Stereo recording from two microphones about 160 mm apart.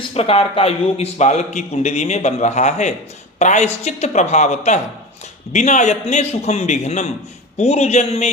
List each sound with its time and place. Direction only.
0.1 s a man's voice: 40° left (ahead or behind)